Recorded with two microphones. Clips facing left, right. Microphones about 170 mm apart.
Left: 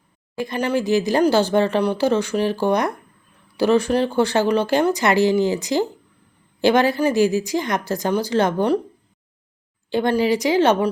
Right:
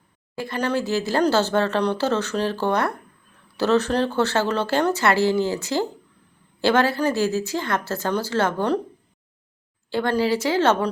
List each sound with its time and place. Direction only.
0.3 s speech: 15° left (ahead or behind)
9.9 s speech: 15° left (ahead or behind)